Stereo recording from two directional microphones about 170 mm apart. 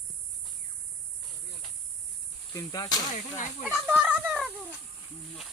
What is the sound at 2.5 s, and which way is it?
Speech, 20° left (ahead or behind).